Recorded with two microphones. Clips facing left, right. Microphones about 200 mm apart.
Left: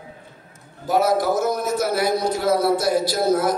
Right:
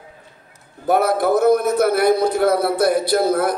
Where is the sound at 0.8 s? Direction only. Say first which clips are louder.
Right 2 dB; 60° right (ahead or behind).